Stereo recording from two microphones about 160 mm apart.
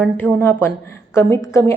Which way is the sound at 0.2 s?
15° left (ahead or behind).